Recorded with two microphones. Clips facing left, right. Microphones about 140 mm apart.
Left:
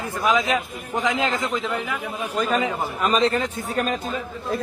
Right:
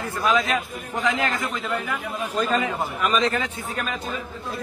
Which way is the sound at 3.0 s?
35° left (ahead or behind).